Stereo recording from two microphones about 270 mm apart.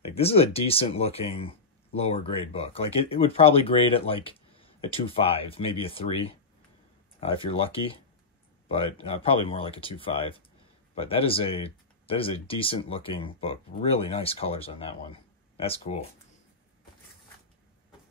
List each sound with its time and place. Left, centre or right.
0.0 s speech: left
7.4 s speech: centre